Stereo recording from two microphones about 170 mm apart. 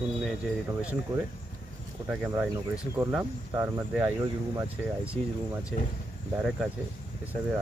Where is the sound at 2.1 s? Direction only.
5° right (ahead or behind).